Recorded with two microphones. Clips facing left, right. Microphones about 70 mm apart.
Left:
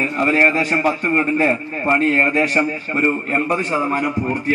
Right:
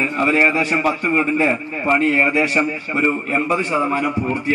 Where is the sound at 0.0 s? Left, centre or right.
Centre.